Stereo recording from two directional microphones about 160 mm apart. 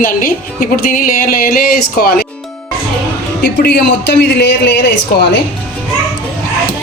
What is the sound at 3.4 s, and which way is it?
A man's voice, 85° left.